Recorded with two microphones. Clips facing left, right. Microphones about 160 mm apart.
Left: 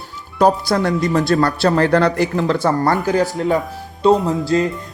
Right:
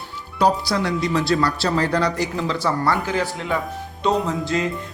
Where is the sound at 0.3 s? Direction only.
50° left (ahead or behind).